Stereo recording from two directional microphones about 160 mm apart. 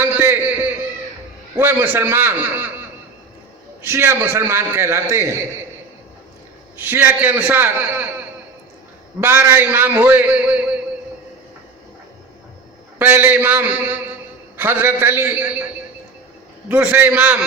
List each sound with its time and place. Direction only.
0.0 s a sound: 10° right (ahead or behind)
1.5 s a man's voice: 15° right (ahead or behind)
3.8 s a man's voice: 15° right (ahead or behind)
6.7 s a man's voice: 15° right (ahead or behind)
9.2 s a man's voice: 10° right (ahead or behind)
13.0 s a man's voice: 10° right (ahead or behind)
16.6 s a man's voice: 10° right (ahead or behind)